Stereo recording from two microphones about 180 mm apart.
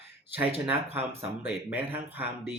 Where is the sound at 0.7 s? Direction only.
10° right (ahead or behind).